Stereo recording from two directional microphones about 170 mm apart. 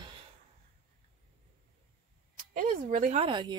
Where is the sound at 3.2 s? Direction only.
25° right (ahead or behind).